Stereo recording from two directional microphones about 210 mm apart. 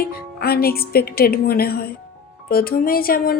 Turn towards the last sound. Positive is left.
turn(degrees=45)  # may be behind; listen again after turning